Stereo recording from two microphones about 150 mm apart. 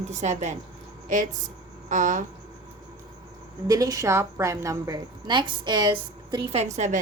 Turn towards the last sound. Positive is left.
turn(degrees=-50)  # may be behind; listen again after turning